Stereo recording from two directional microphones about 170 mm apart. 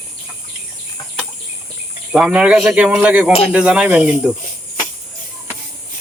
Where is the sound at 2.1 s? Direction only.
5° right (ahead or behind).